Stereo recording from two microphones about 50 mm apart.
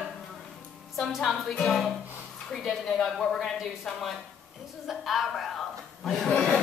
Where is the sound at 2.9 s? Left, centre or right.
Centre.